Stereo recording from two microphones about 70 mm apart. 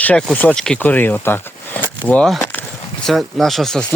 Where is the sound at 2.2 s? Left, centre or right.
Centre.